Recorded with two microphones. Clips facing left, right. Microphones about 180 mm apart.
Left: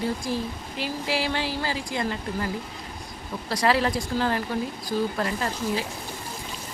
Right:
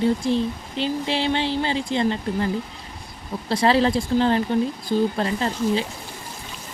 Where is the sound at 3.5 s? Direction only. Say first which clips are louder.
Right 4 dB; 25° right (ahead or behind).